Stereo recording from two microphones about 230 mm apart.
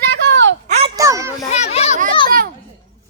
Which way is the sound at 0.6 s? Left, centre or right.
Right.